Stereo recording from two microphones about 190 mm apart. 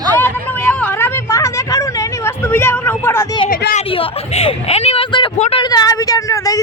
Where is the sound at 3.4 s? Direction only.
50° left (ahead or behind).